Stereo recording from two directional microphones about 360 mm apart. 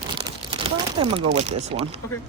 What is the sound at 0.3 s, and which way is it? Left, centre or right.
Speech, centre.